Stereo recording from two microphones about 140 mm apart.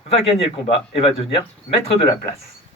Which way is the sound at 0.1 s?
45° left (ahead or behind).